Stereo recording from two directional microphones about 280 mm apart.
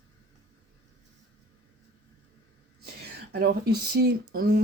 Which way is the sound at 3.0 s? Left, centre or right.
Right.